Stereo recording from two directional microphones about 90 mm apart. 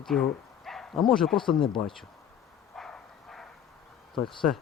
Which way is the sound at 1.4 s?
65° left (ahead or behind).